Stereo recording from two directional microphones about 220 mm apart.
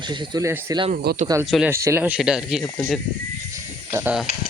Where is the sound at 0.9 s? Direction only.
40° right (ahead or behind).